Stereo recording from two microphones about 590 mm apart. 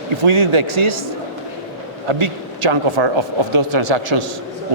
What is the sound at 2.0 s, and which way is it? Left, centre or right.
Speech, right.